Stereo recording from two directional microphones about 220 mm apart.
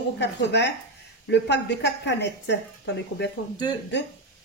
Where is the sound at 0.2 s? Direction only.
50° left (ahead or behind).